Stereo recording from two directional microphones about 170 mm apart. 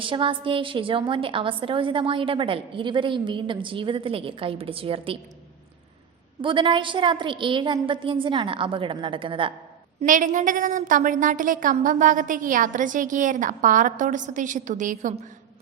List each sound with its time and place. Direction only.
0.0 s a woman's voice: 30° right (ahead or behind)
6.4 s a woman's voice: 30° right (ahead or behind)
10.0 s a woman's voice: 45° right (ahead or behind)